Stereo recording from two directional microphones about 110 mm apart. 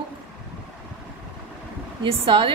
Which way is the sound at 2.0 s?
50° right (ahead or behind).